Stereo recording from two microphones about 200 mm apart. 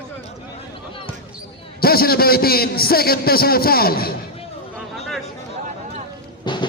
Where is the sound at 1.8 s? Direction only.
50° left (ahead or behind).